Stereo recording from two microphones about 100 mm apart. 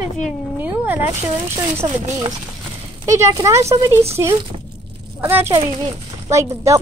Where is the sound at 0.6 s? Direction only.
20° right (ahead or behind).